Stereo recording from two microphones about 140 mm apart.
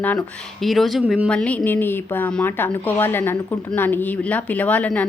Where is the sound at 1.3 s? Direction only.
10° left (ahead or behind).